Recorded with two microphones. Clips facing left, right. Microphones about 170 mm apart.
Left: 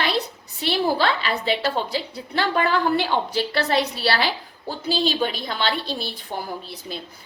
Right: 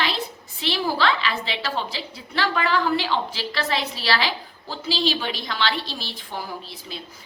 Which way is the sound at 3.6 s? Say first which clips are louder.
Left 3 dB; 45° left (ahead or behind).